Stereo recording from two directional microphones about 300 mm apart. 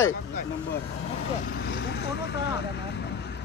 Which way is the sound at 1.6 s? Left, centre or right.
Left.